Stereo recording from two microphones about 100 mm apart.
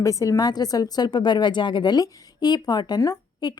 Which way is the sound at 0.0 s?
35° left (ahead or behind).